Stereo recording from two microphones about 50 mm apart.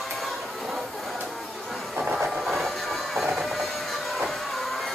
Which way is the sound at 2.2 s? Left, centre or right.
Centre.